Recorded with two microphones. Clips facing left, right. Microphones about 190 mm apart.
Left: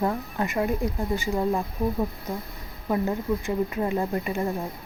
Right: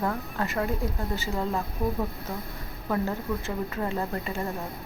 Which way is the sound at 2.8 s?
15° left (ahead or behind).